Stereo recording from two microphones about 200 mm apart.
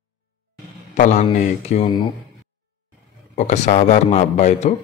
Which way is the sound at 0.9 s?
40° left (ahead or behind).